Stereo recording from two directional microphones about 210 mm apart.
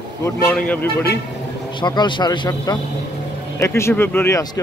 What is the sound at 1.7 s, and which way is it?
Speech, 20° left (ahead or behind).